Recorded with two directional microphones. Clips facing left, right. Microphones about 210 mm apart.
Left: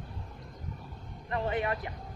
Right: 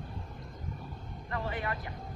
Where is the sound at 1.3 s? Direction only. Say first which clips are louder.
Left 5 dB; 20° left (ahead or behind).